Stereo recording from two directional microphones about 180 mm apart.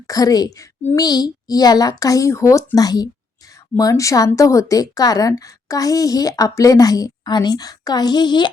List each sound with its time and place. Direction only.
0.1 s speech: 20° left (ahead or behind)